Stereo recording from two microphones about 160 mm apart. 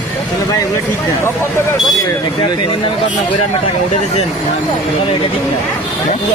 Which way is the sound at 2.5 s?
30° left (ahead or behind).